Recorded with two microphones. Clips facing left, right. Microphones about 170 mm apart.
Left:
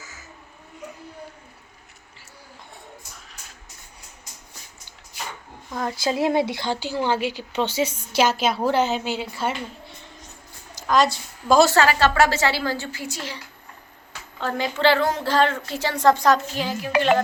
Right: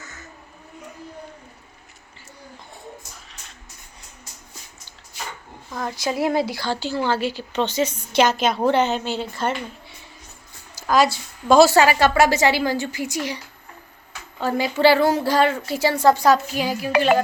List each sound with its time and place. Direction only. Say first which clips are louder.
0.0 s crow: right 3 dB; 5° left (ahead or behind)
5.7 s a woman's voice: left 1 dB; 25° left (ahead or behind); by 9.9 s 5° left (ahead or behind)
10.8 s a woman's voice: right 1 dB; 5° right (ahead or behind)
11.7 s a woman's voice: right 2 dB; 15° right (ahead or behind)